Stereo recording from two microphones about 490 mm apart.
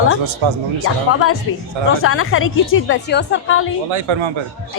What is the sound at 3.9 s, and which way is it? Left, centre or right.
Speech, right.